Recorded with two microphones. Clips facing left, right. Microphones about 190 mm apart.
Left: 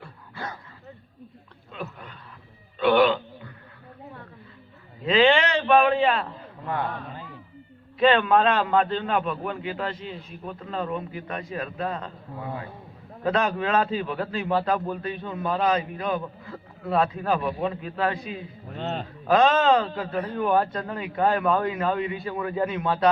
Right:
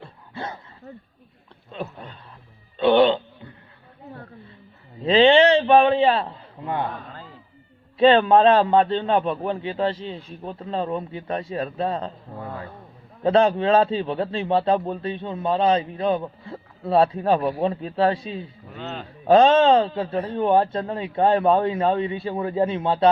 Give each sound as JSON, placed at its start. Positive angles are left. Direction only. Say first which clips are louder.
{"t": 0.0, "sound": "dog", "louder": "right 3 dB", "side_deg": -25}
{"t": 1.7, "sound": "a sound", "louder": "right 4 dB", "side_deg": -30}
{"t": 5.0, "sound": "a sound", "louder": "right 5 dB", "side_deg": -30}
{"t": 7.9, "sound": "a man's voice", "louder": "right 4 dB", "side_deg": -30}
{"t": 13.2, "sound": "a man's voice", "louder": "right 6 dB", "side_deg": -30}
{"t": 18.8, "sound": "a man's voice", "louder": "left 3 dB", "side_deg": 35}
{"t": 19.3, "sound": "a man's voice", "louder": "right 5 dB", "side_deg": -30}